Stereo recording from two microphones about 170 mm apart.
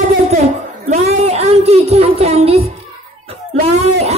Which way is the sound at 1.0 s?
40° right (ahead or behind).